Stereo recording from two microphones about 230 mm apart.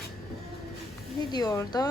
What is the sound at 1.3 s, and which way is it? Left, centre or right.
Speech, centre.